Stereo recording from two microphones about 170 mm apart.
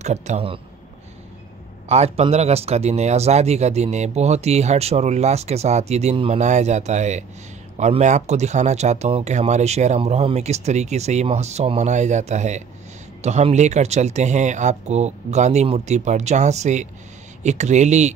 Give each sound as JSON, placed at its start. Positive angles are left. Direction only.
{"t": 0.0, "sound": "speech", "side_deg": -40}
{"t": 1.9, "sound": "speech", "side_deg": -40}